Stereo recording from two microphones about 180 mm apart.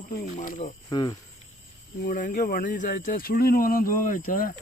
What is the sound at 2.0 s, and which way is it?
Speech, 45° left (ahead or behind).